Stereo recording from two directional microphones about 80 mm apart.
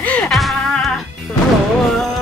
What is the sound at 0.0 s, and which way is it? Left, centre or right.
Music, centre.